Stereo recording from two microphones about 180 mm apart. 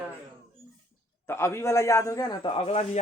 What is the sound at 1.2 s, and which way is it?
Speech, 15° left (ahead or behind).